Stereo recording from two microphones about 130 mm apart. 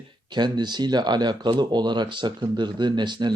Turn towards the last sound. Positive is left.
turn(degrees=-35)  # may be behind; listen again after turning